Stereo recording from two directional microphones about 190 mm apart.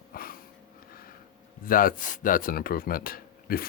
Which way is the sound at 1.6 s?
50° left (ahead or behind).